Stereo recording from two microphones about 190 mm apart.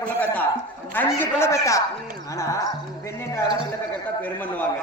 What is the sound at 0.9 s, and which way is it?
Speech, 10° left (ahead or behind).